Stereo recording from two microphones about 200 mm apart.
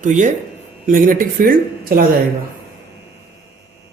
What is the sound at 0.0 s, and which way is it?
Speech, 40° right (ahead or behind).